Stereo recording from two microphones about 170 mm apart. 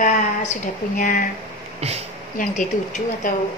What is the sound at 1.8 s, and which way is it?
Speech, 40° right (ahead or behind).